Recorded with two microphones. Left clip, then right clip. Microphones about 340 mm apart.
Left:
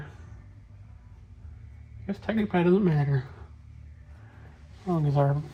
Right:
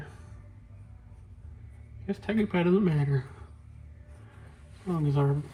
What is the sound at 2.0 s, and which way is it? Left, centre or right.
Speech, centre.